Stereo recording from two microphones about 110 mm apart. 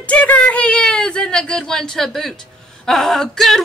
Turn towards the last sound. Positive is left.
turn(degrees=5)  # may be behind; listen again after turning